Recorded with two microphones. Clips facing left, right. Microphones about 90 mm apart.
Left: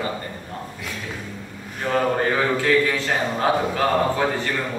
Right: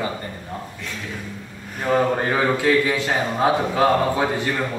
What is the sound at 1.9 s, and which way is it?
Speech, 10° right (ahead or behind).